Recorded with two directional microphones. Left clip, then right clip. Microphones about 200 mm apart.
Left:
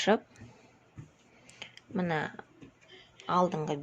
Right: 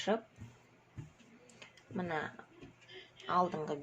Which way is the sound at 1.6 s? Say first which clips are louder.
Left 7 dB; 50° left (ahead or behind).